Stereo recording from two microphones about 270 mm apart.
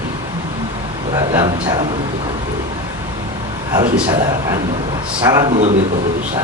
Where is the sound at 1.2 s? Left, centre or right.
Centre.